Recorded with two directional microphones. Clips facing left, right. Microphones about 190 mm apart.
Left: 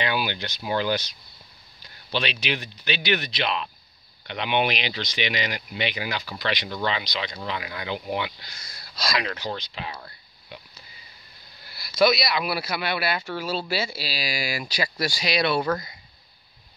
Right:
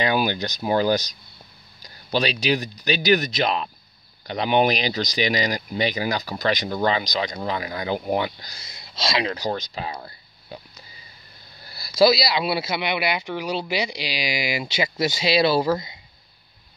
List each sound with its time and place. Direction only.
0.0 s speech: 45° right (ahead or behind)
8.5 s speech: 20° right (ahead or behind)
9.5 s speech: 40° right (ahead or behind)
11.7 s speech: 30° right (ahead or behind)